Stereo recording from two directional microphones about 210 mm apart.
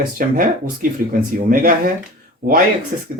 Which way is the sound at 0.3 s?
40° right (ahead or behind).